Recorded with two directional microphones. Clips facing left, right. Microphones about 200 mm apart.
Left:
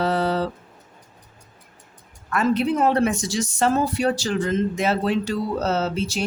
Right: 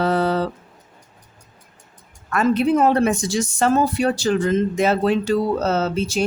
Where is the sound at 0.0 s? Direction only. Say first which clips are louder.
Right 2 dB; 50° right (ahead or behind).